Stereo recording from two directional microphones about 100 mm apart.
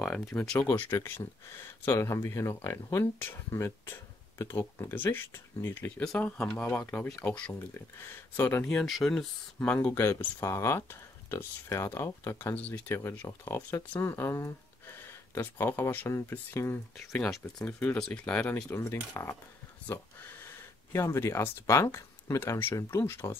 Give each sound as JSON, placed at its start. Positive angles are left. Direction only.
{"t": 0.1, "sound": "speech", "side_deg": 15}
{"t": 1.0, "sound": "speech", "side_deg": 25}
{"t": 5.9, "sound": "speech", "side_deg": 10}
{"t": 7.5, "sound": "speech", "side_deg": 25}
{"t": 8.6, "sound": "speech", "side_deg": 0}
{"t": 9.9, "sound": "speech", "side_deg": 30}
{"t": 12.5, "sound": "speech", "side_deg": 15}
{"t": 17.2, "sound": "speech", "side_deg": 5}
{"t": 20.9, "sound": "speech", "side_deg": 30}